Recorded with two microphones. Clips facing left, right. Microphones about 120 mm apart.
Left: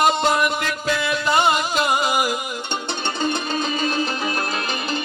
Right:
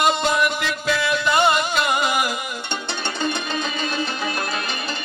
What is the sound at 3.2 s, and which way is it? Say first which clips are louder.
Music: left 2 dB; 35° left (ahead or behind).